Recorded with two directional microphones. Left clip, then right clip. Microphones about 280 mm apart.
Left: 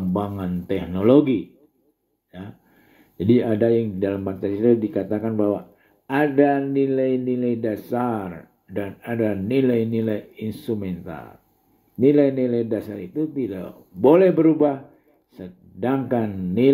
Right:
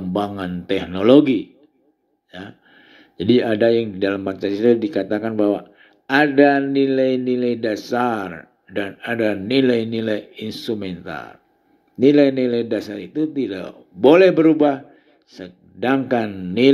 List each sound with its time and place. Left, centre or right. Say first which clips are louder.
0.1 s speech: right 5 dB; right
3.2 s speech: right 3 dB; right